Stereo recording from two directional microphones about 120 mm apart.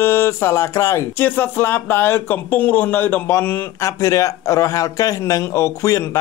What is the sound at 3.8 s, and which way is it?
A man's voice, 25° left (ahead or behind).